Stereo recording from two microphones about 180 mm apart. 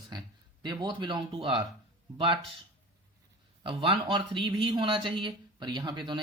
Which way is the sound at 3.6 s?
30° right (ahead or behind).